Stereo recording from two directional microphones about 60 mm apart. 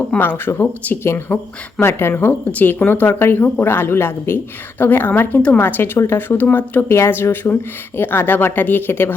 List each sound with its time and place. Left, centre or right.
0.2 s a woman's voice: left
1.3 s speech: left
1.8 s a woman's voice: left
2.5 s a woman's voice: left